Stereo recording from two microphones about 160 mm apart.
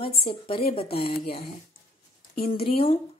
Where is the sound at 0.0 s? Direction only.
35° left (ahead or behind).